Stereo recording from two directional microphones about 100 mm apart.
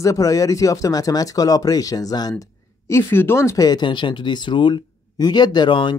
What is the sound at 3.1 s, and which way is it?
Speech, 25° left (ahead or behind).